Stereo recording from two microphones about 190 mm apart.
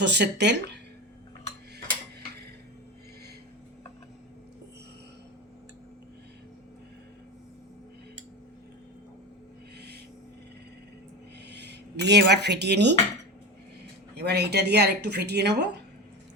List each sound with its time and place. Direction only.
0.0 s speech: 65° right (ahead or behind)
11.4 s speech: 60° right (ahead or behind)
14.2 s speech: 60° right (ahead or behind)